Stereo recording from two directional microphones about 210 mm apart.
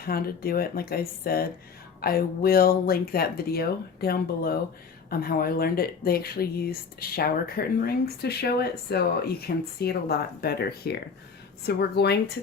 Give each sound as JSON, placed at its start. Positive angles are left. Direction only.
{"t": 0.0, "sound": "speech", "side_deg": 45}